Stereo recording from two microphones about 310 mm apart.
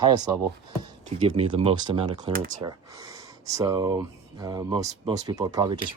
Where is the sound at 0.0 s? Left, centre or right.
Centre.